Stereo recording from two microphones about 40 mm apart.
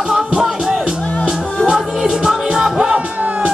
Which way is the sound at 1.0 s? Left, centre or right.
Left.